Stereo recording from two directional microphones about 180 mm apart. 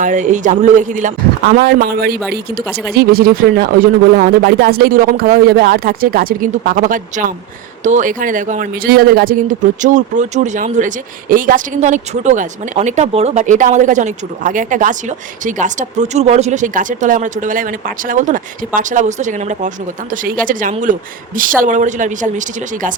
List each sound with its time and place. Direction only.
0.0 s speech: 45° right (ahead or behind)